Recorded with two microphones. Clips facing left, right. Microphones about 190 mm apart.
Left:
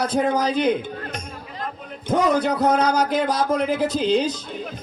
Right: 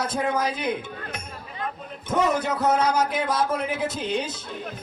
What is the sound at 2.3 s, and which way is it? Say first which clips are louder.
Speech: left 4 dB; 35° left (ahead or behind).